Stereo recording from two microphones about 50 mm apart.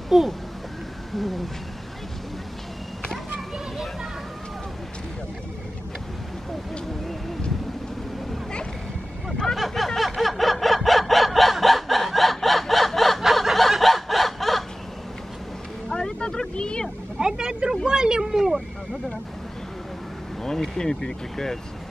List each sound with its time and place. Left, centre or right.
0.1 s speech: centre
9.6 s a sound: centre
15.9 s vehicle: centre
17.2 s vehicle: centre
17.6 s speech: centre
20.4 s speech: centre